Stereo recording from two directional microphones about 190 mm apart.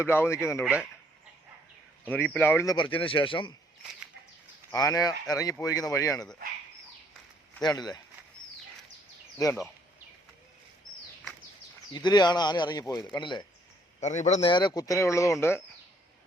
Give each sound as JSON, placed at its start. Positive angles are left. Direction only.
{"t": 0.0, "sound": "speech", "side_deg": 10}
{"t": 0.6, "sound": "speech", "side_deg": -5}
{"t": 2.0, "sound": "speech", "side_deg": 10}
{"t": 2.7, "sound": "speech", "side_deg": 25}
{"t": 4.7, "sound": "speech", "side_deg": 15}
{"t": 7.6, "sound": "speech", "side_deg": 20}
{"t": 11.9, "sound": "speech", "side_deg": 20}
{"t": 14.0, "sound": "a man's voice", "side_deg": 40}
{"t": 14.5, "sound": "speech", "side_deg": 20}